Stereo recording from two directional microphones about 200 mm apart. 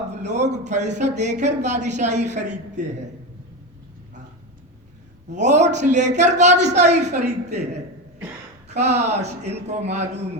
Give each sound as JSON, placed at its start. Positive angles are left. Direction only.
{"t": 0.2, "sound": "a woman's voice", "side_deg": -35}
{"t": 5.3, "sound": "a woman's voice", "side_deg": -35}
{"t": 8.7, "sound": "a woman's voice", "side_deg": -35}